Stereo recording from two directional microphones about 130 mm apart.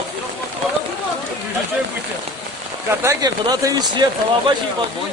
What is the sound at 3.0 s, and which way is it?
Speech, 25° right (ahead or behind).